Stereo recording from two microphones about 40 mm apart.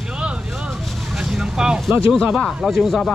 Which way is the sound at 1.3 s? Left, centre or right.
Centre.